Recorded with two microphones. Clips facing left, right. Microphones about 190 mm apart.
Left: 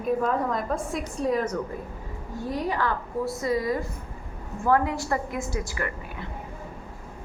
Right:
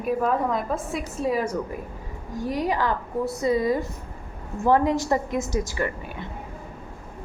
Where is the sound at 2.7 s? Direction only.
20° right (ahead or behind).